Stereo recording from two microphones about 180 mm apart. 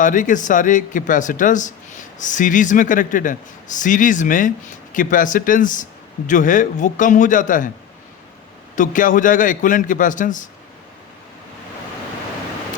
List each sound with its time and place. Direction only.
0.0 s speech: 45° left (ahead or behind)
8.7 s speech: 45° left (ahead or behind)